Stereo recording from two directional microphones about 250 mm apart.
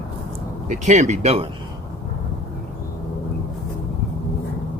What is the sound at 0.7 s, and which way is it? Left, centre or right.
Speech, right.